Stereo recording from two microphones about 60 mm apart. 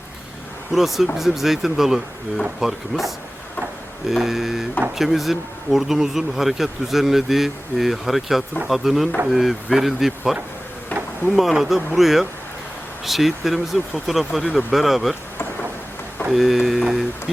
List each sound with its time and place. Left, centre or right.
0.7 s speech: centre
10.9 s a sound: left
11.3 s speech: centre
16.3 s speech: centre